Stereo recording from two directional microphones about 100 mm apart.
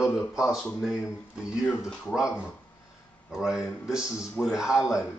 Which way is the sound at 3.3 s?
5° right (ahead or behind).